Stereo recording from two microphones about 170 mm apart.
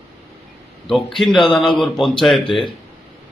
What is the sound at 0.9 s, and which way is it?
Speech, centre (ahead or behind).